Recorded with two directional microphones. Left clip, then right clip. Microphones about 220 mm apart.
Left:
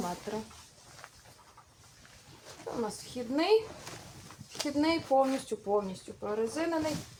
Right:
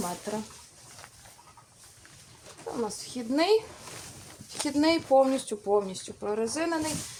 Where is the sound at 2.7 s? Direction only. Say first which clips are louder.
Right 2 dB; 40° right (ahead or behind).